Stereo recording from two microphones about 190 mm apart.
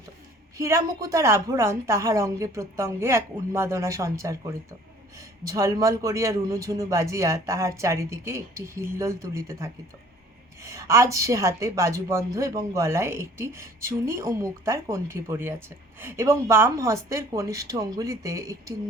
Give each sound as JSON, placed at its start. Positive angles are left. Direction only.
{"t": 0.6, "sound": "a woman's voice", "side_deg": -15}